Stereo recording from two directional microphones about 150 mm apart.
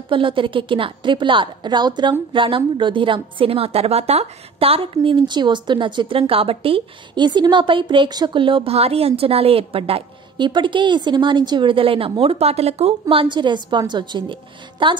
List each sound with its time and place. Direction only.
0.1 s a woman's voice: 35° right (ahead or behind)